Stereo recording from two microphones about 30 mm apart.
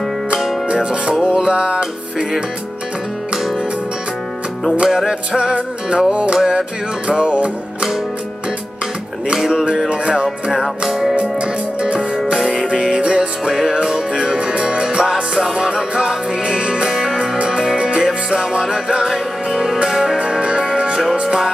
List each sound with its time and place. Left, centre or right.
1.2 s music: right
4.8 s music: centre
5.5 s music: right
7.1 s music: right
9.3 s music: centre
9.8 s music: right
10.2 s music: centre
11.1 s music: right
13.5 s music: centre
14.4 s music: right
16.9 s music: centre
20.2 s music: right